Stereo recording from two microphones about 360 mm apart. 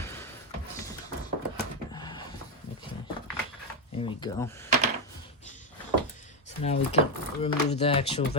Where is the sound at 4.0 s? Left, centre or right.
Centre.